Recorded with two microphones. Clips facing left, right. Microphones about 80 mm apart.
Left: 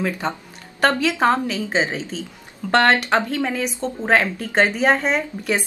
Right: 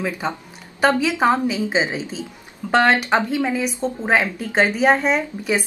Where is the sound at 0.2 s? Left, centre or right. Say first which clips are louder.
Even; centre.